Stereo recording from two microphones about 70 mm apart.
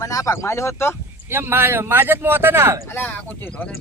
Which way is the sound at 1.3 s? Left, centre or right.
Right.